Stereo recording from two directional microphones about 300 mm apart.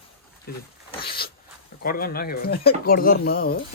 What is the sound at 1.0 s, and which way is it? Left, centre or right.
Speech, left.